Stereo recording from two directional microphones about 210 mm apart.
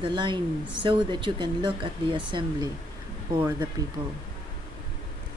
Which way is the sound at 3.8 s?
15° right (ahead or behind).